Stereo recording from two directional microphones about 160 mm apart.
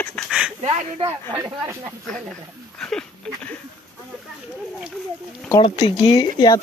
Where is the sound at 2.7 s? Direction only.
5° left (ahead or behind).